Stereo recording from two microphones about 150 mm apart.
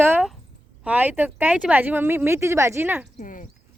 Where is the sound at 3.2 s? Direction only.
60° left (ahead or behind).